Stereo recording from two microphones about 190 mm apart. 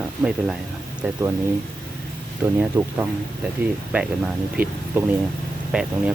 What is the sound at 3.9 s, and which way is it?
Speech, 10° right (ahead or behind).